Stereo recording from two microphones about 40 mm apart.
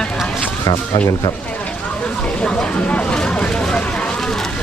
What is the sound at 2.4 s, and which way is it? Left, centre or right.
Vehicle, left.